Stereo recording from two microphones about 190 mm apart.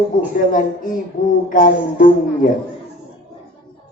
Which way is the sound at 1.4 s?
45° left (ahead or behind).